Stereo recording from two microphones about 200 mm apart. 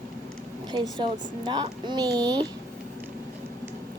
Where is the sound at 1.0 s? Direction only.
20° right (ahead or behind).